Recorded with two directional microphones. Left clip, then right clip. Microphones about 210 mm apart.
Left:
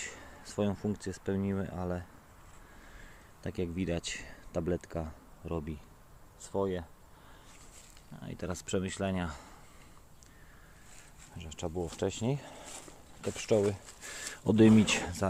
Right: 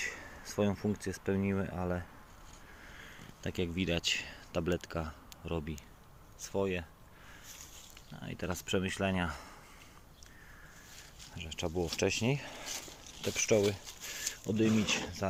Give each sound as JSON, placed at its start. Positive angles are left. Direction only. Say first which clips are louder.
{"t": 0.1, "sound": "speech", "louder": "right 3 dB", "side_deg": 10}
{"t": 3.4, "sound": "speech", "louder": "right 1 dB", "side_deg": 5}
{"t": 6.6, "sound": "speech", "louder": "left 1 dB", "side_deg": -15}
{"t": 8.2, "sound": "speech", "louder": "right 1 dB", "side_deg": 5}
{"t": 11.3, "sound": "speech", "louder": "right 2 dB", "side_deg": 5}
{"t": 12.2, "sound": "speech", "louder": "right 1 dB", "side_deg": 10}
{"t": 13.7, "sound": "speech", "louder": "even", "side_deg": 30}
{"t": 14.4, "sound": "speech", "louder": "left 7 dB", "side_deg": 55}